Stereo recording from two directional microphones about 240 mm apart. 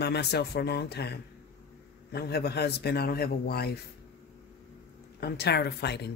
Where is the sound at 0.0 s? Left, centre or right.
Left.